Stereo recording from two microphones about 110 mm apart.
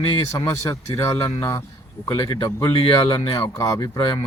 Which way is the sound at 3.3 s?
30° left (ahead or behind).